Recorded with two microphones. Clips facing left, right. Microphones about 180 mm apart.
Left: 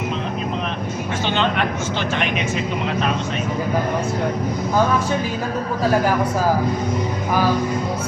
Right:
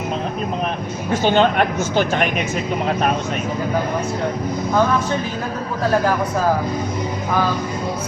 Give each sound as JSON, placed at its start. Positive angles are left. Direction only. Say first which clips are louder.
{"t": 1.2, "sound": "speech", "louder": "right 6 dB", "side_deg": -45}